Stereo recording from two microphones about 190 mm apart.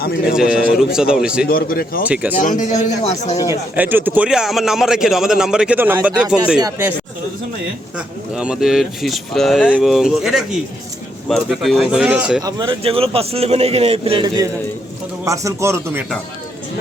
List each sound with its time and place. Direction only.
0.0 s speech: 55° left (ahead or behind)
0.3 s a man's voice: 5° right (ahead or behind)
1.5 s speech: 50° left (ahead or behind)
2.0 s a man's voice: 5° right (ahead or behind)
2.4 s speech: 40° left (ahead or behind)
3.5 s a man's voice: 10° right (ahead or behind)
7.9 s a man's voice: 5° right (ahead or behind)
12.4 s a man's voice: 20° right (ahead or behind)